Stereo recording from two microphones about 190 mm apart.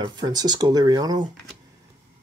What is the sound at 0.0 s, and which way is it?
Speech, 20° right (ahead or behind).